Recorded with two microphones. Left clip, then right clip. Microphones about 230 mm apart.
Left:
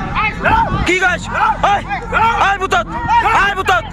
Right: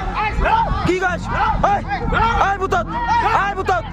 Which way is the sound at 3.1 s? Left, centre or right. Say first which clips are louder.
Left 5 dB; left.